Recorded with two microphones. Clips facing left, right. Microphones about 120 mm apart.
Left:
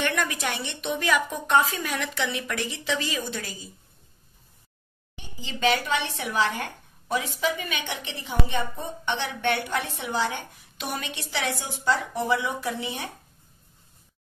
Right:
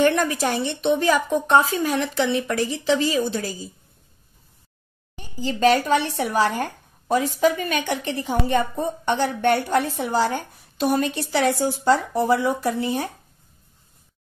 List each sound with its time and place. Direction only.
0.0 s speech: 35° right (ahead or behind)
5.1 s speech: 40° right (ahead or behind)